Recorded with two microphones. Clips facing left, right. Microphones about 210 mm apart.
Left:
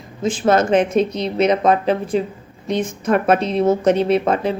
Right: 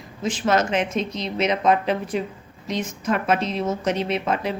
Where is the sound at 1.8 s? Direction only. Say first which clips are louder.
Left 5 dB; 30° left (ahead or behind).